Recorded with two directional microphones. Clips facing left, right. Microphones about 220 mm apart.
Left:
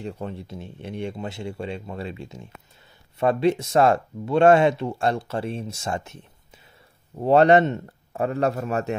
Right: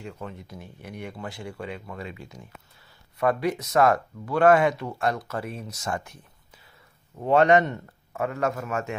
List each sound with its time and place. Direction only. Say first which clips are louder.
0.0 s speech: left 5 dB; 35° left (ahead or behind)